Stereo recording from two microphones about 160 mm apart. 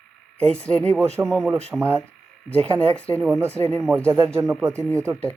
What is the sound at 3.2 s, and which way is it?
Speech, 15° right (ahead or behind).